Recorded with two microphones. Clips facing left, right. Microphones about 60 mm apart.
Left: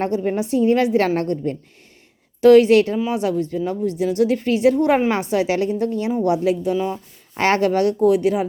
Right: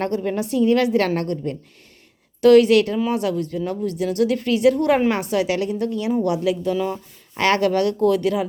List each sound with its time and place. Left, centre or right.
0.0 s a woman's voice: left